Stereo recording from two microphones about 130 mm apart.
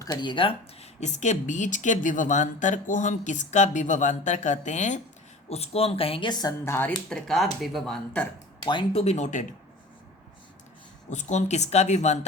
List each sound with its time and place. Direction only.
0.0 s speech: 35° left (ahead or behind); by 4.9 s 65° left (ahead or behind)
5.5 s a woman's voice: 50° left (ahead or behind); by 6.5 s 35° left (ahead or behind)
6.7 s speech: 15° left (ahead or behind)
7.1 s speech: centre (ahead or behind)
8.6 s a woman's voice: 40° left (ahead or behind); by 9.5 s 70° left (ahead or behind)
11.1 s speech: 65° left (ahead or behind)